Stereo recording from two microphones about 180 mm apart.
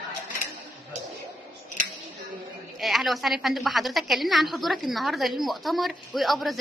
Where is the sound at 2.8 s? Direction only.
Centre (ahead or behind).